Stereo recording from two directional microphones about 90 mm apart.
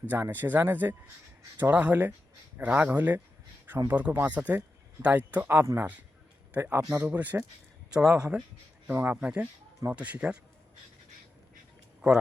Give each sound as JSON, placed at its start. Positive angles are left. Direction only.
{"t": 0.1, "sound": "a man's voice", "side_deg": -20}
{"t": 12.0, "sound": "speech", "side_deg": -10}